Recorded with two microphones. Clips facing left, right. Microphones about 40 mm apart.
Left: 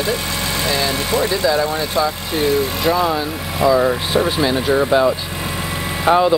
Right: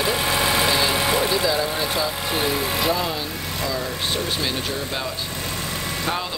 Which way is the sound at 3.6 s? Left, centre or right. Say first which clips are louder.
Left 13 dB; centre.